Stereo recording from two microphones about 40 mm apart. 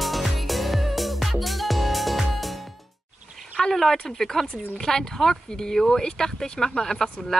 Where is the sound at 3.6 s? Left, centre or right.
Centre.